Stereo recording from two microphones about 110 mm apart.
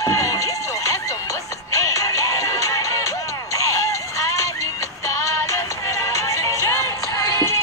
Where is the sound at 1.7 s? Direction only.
30° left (ahead or behind).